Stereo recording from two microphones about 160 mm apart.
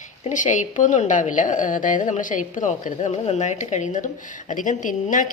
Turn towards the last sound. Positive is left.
turn(degrees=55)  # may be behind; listen again after turning